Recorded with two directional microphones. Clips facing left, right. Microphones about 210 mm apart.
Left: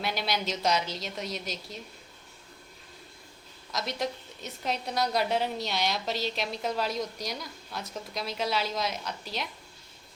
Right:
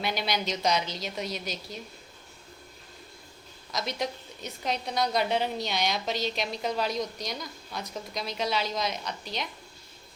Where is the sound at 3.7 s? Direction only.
Centre (ahead or behind).